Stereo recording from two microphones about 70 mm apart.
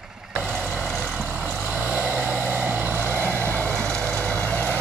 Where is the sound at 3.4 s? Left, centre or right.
Left.